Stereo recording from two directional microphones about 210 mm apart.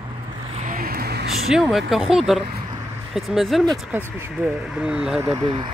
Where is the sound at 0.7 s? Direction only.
45° right (ahead or behind).